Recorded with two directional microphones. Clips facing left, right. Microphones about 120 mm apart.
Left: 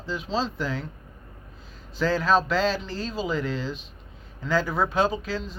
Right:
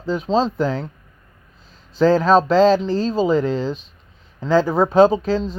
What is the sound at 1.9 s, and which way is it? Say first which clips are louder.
Speech: right 8 dB; 40° right (ahead or behind).